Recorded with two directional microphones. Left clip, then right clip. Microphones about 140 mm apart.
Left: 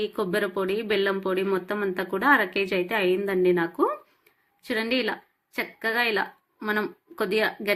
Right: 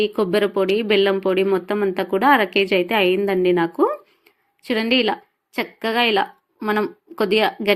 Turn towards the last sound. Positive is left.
turn(degrees=-40)  # may be behind; listen again after turning